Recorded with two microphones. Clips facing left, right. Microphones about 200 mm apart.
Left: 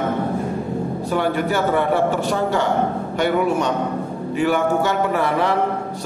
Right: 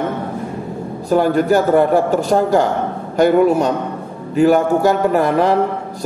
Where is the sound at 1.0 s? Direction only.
40° right (ahead or behind).